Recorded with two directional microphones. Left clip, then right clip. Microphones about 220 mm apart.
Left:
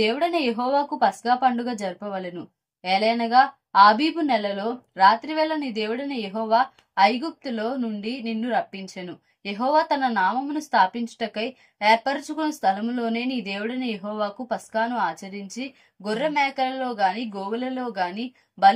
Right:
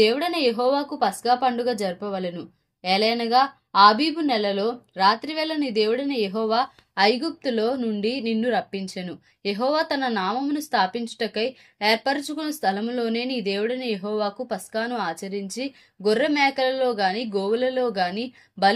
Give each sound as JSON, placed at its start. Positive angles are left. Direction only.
{"t": 0.0, "sound": "a woman's voice", "side_deg": -40}